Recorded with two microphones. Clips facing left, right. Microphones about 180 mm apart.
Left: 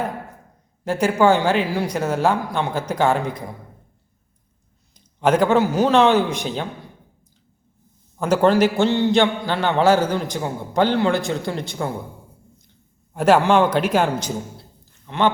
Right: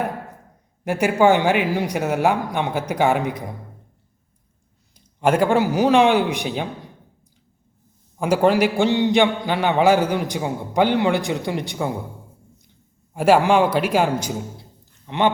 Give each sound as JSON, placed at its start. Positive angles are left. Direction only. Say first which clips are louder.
{"t": 0.9, "sound": "a man's voice", "louder": "even", "side_deg": -15}
{"t": 5.2, "sound": "a man's voice", "louder": "left 1 dB", "side_deg": -10}
{"t": 8.2, "sound": "a man's voice", "louder": "left 1 dB", "side_deg": -10}
{"t": 13.1, "sound": "a man's voice", "louder": "even", "side_deg": -10}